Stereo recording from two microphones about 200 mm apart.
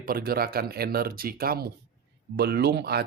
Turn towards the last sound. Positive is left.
turn(degrees=-50)  # may be behind; listen again after turning